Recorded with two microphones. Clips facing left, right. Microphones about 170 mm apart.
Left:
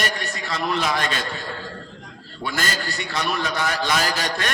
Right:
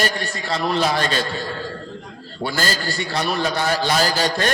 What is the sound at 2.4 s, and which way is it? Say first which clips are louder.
A man's voice: right 3 dB; 30° right (ahead or behind).